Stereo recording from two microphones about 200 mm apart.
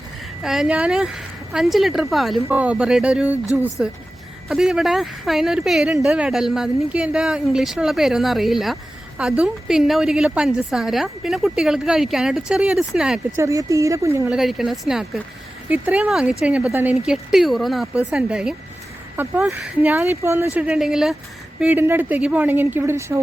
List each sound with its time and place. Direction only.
0.4 s speech: 5° right (ahead or behind)
13.4 s speech: 15° right (ahead or behind)
14.3 s speech: centre (ahead or behind)